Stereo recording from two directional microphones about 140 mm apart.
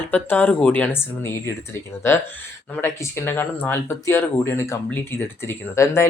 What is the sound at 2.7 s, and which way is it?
Speech, 20° left (ahead or behind).